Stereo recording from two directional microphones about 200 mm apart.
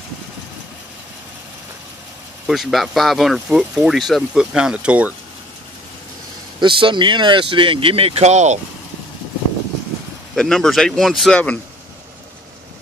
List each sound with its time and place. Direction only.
2.4 s speech: centre (ahead or behind)
6.6 s speech: 25° right (ahead or behind)
10.3 s speech: 5° left (ahead or behind)